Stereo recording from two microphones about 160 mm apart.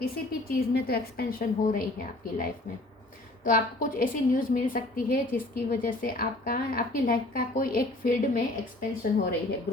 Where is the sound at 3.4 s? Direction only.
60° left (ahead or behind).